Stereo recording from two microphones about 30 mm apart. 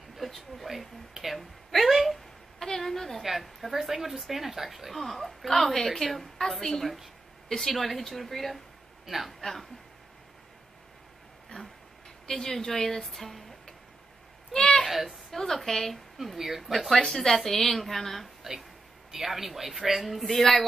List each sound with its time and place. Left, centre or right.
0.2 s a woman's voice: centre
2.6 s a woman's voice: centre
7.7 s a woman's voice: centre
9.0 s speech: centre
9.4 s a woman's voice: centre
11.5 s a sound: left
12.3 s a woman's voice: centre
14.9 s a woman's voice: centre
15.3 s a woman's voice: centre
16.2 s a woman's voice: centre
16.9 s a woman's voice: centre
19.1 s a woman's voice: centre
20.2 s a woman's voice: centre